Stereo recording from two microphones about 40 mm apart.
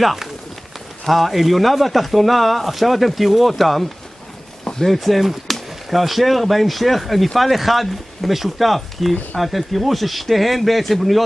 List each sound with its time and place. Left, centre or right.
0.0 s speech: centre
4.9 s speech: centre